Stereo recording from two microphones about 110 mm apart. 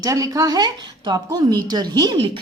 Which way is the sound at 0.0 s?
30° right (ahead or behind).